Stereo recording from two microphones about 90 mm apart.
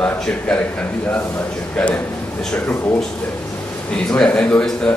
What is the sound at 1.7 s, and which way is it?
Speech, 10° left (ahead or behind).